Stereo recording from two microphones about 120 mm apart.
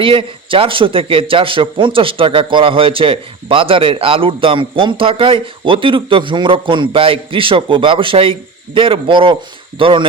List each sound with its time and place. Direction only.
0.0 s a man's voice: 45° right (ahead or behind)